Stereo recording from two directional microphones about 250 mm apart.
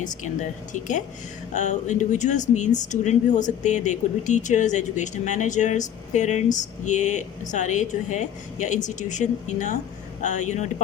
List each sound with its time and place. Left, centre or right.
0.7 s speech: left